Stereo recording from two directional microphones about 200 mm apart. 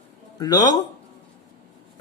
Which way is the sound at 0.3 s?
20° left (ahead or behind).